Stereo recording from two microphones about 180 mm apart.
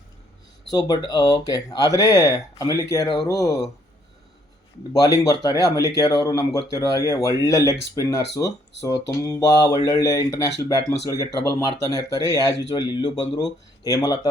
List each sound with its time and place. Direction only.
0.7 s speech: 20° left (ahead or behind)
4.9 s speech: 20° left (ahead or behind)